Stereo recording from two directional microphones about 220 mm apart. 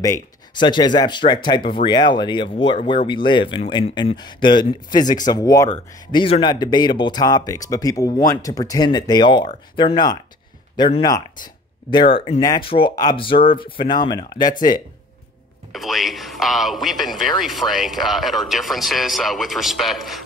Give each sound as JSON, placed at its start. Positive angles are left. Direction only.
{"t": 0.0, "sound": "speech", "side_deg": 15}
{"t": 15.7, "sound": "speech", "side_deg": 0}